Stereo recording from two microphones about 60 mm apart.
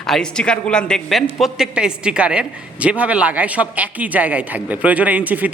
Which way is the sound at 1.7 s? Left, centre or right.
Centre.